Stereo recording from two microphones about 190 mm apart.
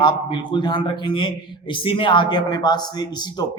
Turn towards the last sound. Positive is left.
turn(degrees=20)  # may be behind; listen again after turning